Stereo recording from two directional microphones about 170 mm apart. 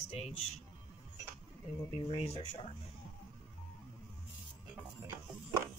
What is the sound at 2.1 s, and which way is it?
Speech, 35° left (ahead or behind).